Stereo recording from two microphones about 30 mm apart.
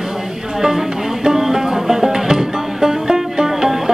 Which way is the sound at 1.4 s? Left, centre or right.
Centre.